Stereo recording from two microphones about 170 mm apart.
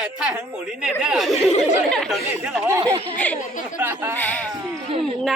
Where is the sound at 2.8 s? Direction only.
30° right (ahead or behind).